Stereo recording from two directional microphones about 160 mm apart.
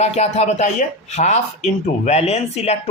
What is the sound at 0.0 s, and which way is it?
Speech, 40° left (ahead or behind).